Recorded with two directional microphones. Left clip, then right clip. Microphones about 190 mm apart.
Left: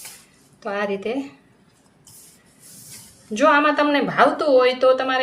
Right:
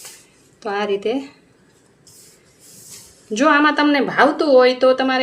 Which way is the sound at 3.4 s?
45° right (ahead or behind).